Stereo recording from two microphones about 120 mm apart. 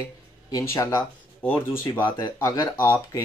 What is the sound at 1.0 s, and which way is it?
Speech, 15° left (ahead or behind).